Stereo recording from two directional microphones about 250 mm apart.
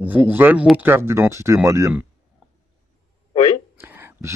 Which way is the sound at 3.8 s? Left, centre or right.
Centre.